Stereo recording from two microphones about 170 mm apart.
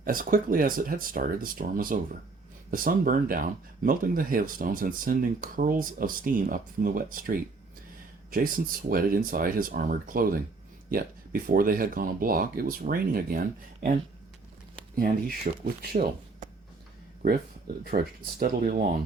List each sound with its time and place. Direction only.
0.0 s speech: 55° right (ahead or behind)
14.9 s speech: 55° right (ahead or behind)
17.9 s speech: 60° right (ahead or behind)